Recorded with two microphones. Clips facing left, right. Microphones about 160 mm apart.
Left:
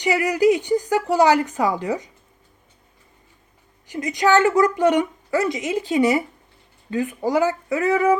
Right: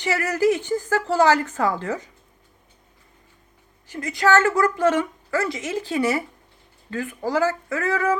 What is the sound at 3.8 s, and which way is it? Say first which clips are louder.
Speech: left 2 dB; 20° left (ahead or behind).